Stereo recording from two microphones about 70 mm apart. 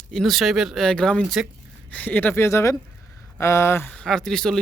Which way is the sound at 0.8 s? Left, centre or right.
Centre.